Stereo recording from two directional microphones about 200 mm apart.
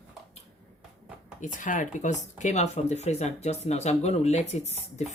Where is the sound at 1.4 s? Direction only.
40° left (ahead or behind).